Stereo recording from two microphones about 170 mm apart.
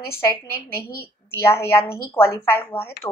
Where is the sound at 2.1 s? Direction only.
15° left (ahead or behind).